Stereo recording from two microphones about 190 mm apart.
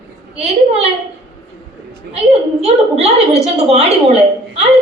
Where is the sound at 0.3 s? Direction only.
30° right (ahead or behind).